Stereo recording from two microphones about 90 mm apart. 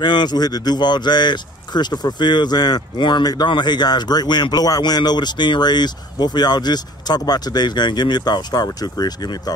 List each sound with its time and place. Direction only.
0.0 s speech: 55° left (ahead or behind)